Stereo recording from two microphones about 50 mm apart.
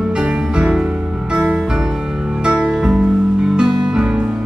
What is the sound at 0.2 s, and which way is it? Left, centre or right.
Music, centre.